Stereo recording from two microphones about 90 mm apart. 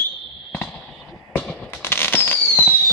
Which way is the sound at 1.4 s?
5° left (ahead or behind).